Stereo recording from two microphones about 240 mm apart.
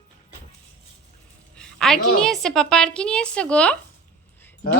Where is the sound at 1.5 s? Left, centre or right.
Centre.